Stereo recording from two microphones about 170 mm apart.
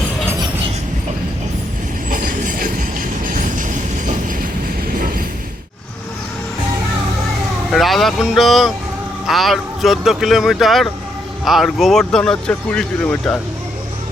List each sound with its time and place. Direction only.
2.0 s train: 55° right (ahead or behind)
4.9 s a sound: 55° right (ahead or behind)
7.7 s vehicle: centre (ahead or behind)
9.2 s speech: centre (ahead or behind)